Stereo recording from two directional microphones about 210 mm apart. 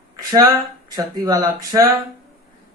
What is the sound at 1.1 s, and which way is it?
Speech, 20° right (ahead or behind).